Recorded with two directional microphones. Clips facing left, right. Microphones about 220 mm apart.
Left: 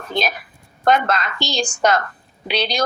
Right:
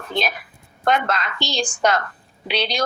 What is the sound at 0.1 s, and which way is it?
A woman's voice, 40° left (ahead or behind).